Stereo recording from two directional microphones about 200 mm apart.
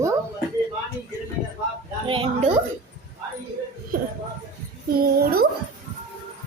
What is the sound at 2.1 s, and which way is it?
Speech, 25° right (ahead or behind).